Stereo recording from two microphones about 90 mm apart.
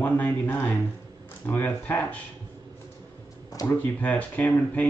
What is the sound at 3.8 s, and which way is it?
Speech, 15° left (ahead or behind).